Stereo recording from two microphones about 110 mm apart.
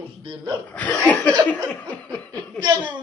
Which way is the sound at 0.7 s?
15° left (ahead or behind).